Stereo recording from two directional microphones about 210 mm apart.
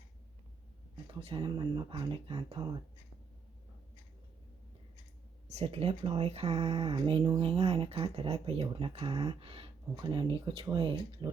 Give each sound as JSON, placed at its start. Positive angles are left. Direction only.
{"t": 1.2, "sound": "speech", "side_deg": -25}
{"t": 5.5, "sound": "speech", "side_deg": -30}